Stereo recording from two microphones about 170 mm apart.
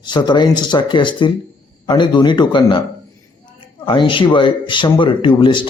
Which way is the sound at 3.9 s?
30° left (ahead or behind).